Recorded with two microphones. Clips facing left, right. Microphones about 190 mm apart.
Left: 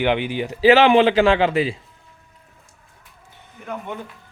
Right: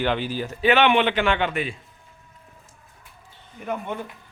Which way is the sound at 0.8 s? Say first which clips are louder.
Left 6 dB; 30° left (ahead or behind).